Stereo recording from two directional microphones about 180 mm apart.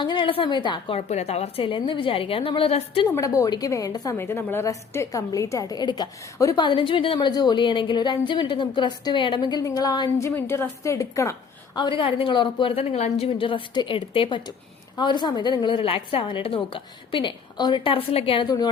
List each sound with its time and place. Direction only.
0.0 s a woman's voice: 25° left (ahead or behind)
3.2 s a woman's voice: 20° left (ahead or behind)